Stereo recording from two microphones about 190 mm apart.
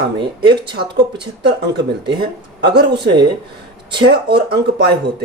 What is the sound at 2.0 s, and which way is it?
Speech, 60° right (ahead or behind).